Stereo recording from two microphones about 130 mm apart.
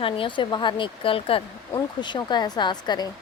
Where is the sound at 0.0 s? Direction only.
40° left (ahead or behind).